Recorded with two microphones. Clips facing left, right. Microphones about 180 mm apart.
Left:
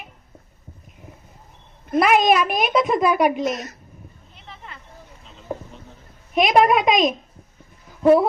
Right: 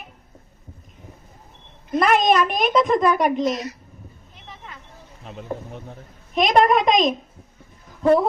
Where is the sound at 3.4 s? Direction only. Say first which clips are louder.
Right 2 dB; 50° left (ahead or behind).